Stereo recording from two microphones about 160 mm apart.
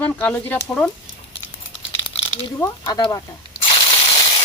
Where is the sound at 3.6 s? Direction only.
35° left (ahead or behind).